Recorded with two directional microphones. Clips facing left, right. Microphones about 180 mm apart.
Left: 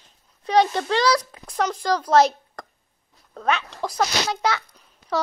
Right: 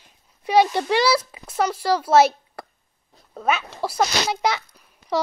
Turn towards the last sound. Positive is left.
turn(degrees=-10)  # may be behind; listen again after turning